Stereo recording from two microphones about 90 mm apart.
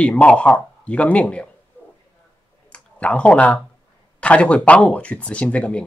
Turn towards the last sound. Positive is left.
turn(degrees=15)  # may be behind; listen again after turning